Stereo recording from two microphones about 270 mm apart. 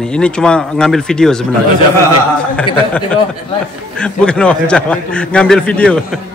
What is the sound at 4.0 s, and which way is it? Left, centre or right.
Speech, centre.